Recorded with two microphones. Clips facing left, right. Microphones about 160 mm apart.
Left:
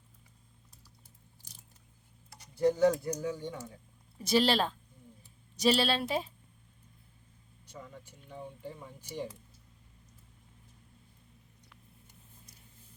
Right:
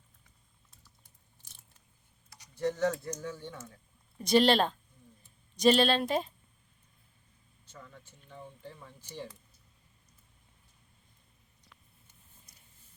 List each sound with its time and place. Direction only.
1.4 s scissors: 40° left (ahead or behind)
2.6 s speech: 10° left (ahead or behind)
7.7 s speech: 15° left (ahead or behind)